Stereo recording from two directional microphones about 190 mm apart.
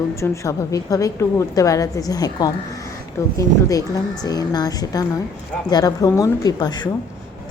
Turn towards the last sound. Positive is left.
turn(degrees=20)  # may be behind; listen again after turning